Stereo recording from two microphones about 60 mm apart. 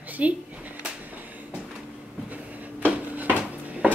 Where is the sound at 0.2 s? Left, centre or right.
Right.